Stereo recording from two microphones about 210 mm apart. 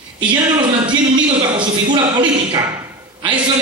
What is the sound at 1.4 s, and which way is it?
A man's voice, 20° right (ahead or behind).